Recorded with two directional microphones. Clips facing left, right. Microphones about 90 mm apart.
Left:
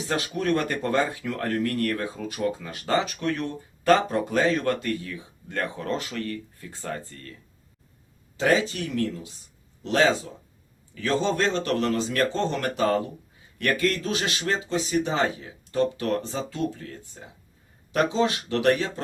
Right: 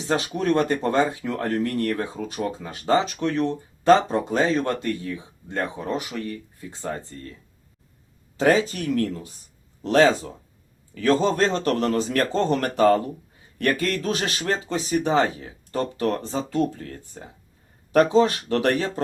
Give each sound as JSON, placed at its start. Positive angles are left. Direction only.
{"t": 0.0, "sound": "speech", "side_deg": -25}
{"t": 8.4, "sound": "speech", "side_deg": -40}
{"t": 13.6, "sound": "speech", "side_deg": -35}